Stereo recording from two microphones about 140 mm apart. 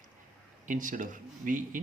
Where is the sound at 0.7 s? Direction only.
70° right (ahead or behind).